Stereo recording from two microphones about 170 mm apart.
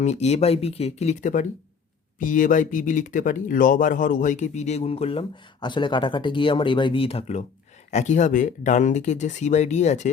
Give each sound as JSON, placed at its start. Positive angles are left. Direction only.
{"t": 0.0, "sound": "speech", "side_deg": 40}